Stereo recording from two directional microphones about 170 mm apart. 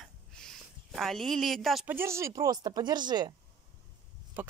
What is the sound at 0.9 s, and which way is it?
Speech, centre (ahead or behind).